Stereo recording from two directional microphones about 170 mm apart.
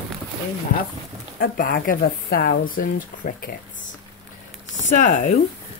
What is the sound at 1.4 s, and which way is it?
Speech, 60° left (ahead or behind).